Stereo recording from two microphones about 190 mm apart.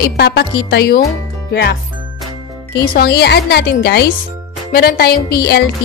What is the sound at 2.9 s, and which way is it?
A woman's voice, 60° left (ahead or behind).